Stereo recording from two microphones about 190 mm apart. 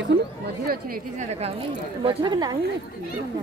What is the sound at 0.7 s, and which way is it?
Speech, 50° right (ahead or behind).